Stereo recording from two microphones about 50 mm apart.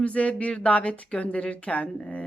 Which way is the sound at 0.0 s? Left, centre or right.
Left.